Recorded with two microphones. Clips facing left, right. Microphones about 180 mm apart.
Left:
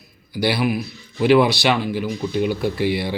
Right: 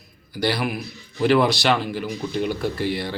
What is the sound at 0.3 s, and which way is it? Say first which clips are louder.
A man's voice: left 4 dB; 10° left (ahead or behind).